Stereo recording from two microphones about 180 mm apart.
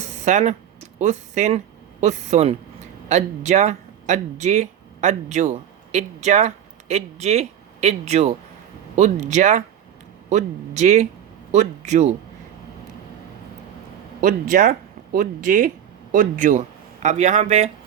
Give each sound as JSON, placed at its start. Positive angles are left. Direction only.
{"t": 0.0, "sound": "a man's voice", "side_deg": -40}
{"t": 14.2, "sound": "a man's voice", "side_deg": -50}